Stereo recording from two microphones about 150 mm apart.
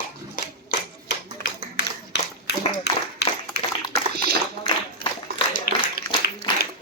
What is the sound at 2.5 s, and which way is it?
Clapping, 90° left.